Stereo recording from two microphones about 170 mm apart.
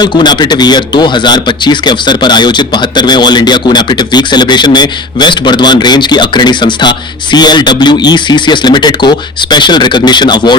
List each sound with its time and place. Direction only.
0.0 s speech: 25° left (ahead or behind)